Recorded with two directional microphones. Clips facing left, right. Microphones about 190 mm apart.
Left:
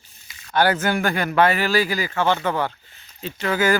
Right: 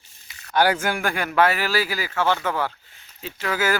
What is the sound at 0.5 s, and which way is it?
Speech, 10° right (ahead or behind).